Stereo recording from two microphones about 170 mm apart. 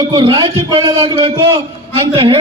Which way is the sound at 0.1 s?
25° right (ahead or behind).